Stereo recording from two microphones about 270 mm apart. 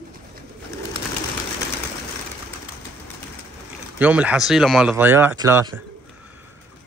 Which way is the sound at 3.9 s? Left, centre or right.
Centre.